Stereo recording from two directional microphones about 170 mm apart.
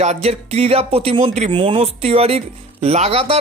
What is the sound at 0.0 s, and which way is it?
Speech, 40° right (ahead or behind).